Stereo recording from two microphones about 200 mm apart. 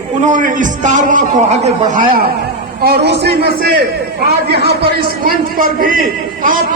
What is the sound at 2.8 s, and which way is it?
A man's voice, 55° right (ahead or behind).